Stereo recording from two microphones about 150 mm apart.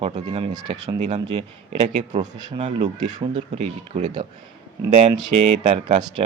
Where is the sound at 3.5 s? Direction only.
50° right (ahead or behind).